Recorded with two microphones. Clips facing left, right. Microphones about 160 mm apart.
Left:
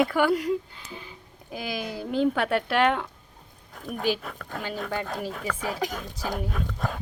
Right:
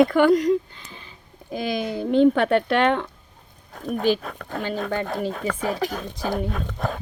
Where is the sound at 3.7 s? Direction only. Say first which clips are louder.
Right 7 dB; 45° right (ahead or behind).